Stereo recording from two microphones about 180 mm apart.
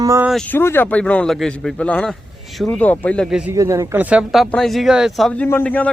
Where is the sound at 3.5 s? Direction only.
15° right (ahead or behind).